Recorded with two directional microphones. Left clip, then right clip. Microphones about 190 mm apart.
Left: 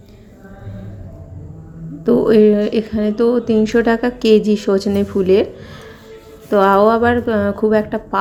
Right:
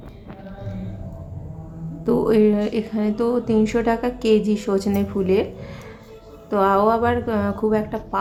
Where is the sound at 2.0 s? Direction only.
15° left (ahead or behind).